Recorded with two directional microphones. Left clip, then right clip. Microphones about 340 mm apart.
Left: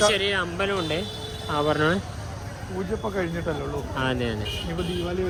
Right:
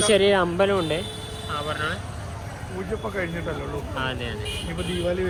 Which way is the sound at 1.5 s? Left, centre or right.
Left.